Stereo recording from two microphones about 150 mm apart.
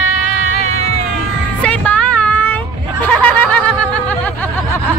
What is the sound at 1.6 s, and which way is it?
Child singing, 10° left (ahead or behind).